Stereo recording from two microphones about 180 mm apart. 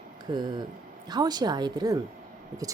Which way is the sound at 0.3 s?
25° right (ahead or behind).